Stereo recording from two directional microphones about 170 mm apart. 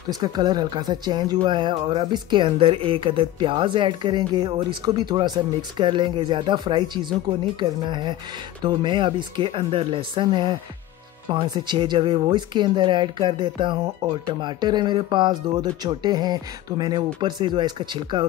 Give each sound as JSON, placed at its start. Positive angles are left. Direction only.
{"t": 0.1, "sound": "speech", "side_deg": -25}